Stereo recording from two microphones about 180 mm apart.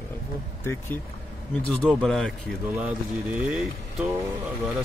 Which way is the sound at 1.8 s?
Centre (ahead or behind).